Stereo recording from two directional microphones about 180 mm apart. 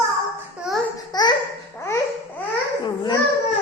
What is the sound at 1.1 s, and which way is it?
Babbling, 20° left (ahead or behind).